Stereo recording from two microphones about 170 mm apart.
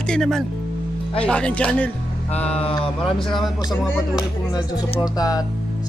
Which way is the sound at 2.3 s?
40° left (ahead or behind).